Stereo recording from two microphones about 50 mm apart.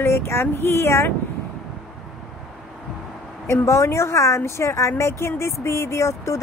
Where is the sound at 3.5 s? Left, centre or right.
Left.